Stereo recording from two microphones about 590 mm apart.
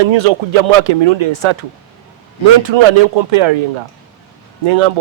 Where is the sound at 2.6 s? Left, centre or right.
Right.